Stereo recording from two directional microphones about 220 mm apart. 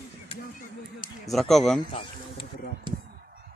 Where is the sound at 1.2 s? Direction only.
Centre (ahead or behind).